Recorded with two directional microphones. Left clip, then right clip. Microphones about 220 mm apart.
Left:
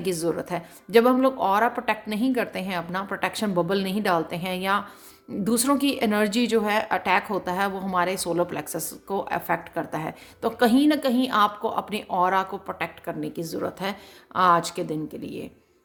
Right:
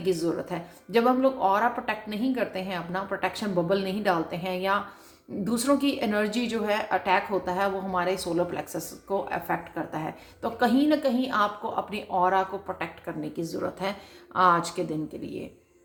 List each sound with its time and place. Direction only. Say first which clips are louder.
0.0 s a woman's voice: left 1 dB; 45° left (ahead or behind)